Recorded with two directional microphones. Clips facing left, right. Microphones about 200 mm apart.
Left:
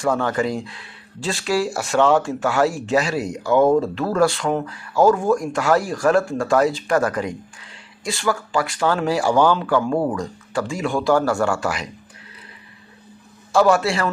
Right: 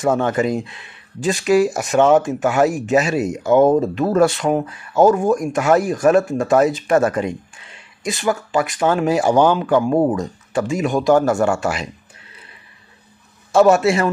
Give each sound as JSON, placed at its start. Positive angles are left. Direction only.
{"t": 0.0, "sound": "speech", "side_deg": -20}
{"t": 13.5, "sound": "speech", "side_deg": -25}